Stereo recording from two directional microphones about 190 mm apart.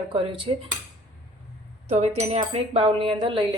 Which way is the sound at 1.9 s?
30° right (ahead or behind).